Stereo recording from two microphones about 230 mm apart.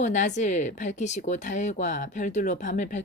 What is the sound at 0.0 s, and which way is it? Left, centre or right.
Speech, left.